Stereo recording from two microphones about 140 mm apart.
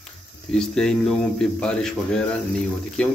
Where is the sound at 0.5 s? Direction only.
5° left (ahead or behind).